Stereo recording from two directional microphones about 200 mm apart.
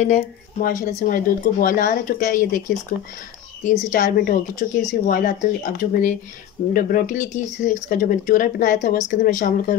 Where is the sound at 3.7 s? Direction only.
40° left (ahead or behind).